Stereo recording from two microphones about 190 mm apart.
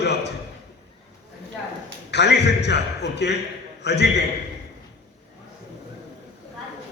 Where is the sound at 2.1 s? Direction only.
65° left (ahead or behind).